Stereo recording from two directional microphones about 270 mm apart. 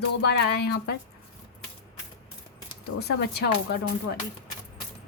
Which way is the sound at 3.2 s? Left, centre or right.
Left.